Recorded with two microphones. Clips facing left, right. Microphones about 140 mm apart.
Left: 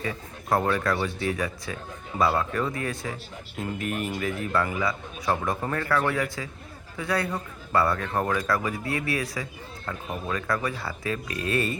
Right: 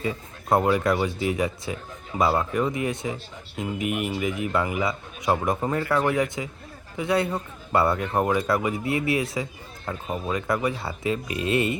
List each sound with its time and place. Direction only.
0.0 s a man's voice: 20° right (ahead or behind)